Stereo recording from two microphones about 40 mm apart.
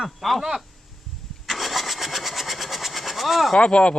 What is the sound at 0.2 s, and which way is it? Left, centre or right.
Speech, centre.